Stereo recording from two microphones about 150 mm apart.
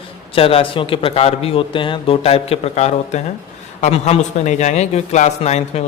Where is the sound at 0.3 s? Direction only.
40° left (ahead or behind).